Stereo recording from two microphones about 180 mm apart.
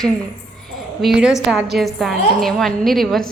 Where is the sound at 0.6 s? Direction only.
Centre (ahead or behind).